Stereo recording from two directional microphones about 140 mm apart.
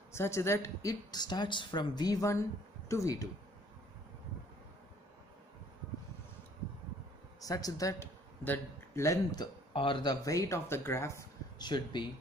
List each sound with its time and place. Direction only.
0.1 s speech: 20° left (ahead or behind)
7.3 s speech: 25° left (ahead or behind)
10.2 s speech: 20° left (ahead or behind)
11.6 s speech: 30° left (ahead or behind)